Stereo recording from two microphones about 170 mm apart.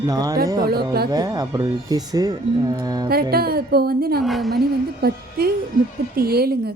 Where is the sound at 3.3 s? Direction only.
65° right (ahead or behind).